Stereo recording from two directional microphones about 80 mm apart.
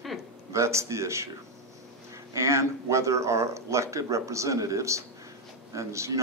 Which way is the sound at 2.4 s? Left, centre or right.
Right.